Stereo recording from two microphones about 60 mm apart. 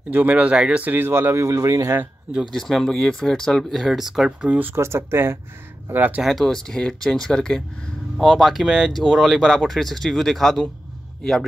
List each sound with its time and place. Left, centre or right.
0.1 s speech: right
0.9 s speech: right
2.5 s speech: centre
3.7 s speech: centre
4.7 s speech: right
5.9 s speech: right
6.2 s speech: centre
8.2 s speech: centre